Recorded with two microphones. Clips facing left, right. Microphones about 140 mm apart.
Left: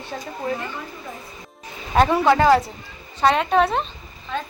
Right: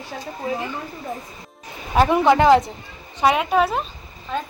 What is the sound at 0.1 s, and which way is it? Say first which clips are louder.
Speech: left 2 dB; centre (ahead or behind).